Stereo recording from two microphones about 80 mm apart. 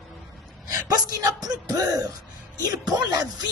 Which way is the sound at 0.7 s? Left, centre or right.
Right.